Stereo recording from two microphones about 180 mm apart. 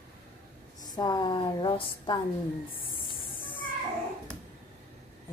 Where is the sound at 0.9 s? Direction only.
25° left (ahead or behind).